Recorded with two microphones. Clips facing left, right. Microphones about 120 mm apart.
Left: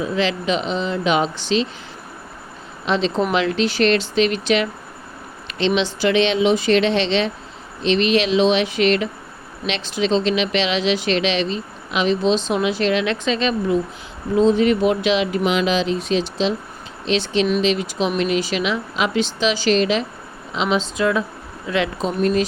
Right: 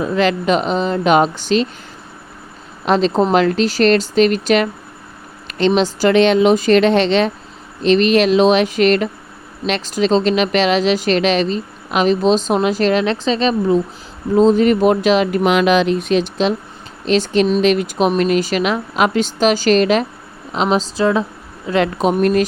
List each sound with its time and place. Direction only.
0.0 s speech: 50° right (ahead or behind)
2.8 s speech: 45° right (ahead or behind)
21.9 s speech: 60° right (ahead or behind)